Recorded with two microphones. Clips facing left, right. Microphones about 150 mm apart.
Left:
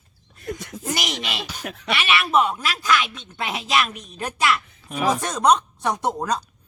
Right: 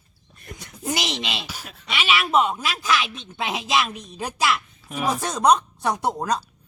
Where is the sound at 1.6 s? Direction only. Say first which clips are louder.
Left 9 dB; 70° left (ahead or behind).